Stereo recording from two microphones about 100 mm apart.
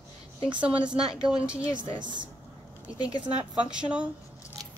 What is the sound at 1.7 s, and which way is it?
Speech, 50° right (ahead or behind).